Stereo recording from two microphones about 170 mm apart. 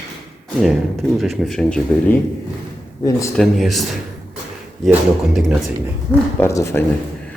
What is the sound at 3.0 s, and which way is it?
Speech, 20° left (ahead or behind).